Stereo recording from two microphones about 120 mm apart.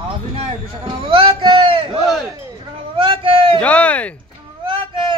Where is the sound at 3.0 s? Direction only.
45° right (ahead or behind).